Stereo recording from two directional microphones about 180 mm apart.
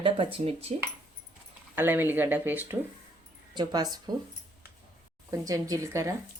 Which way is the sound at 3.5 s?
25° right (ahead or behind).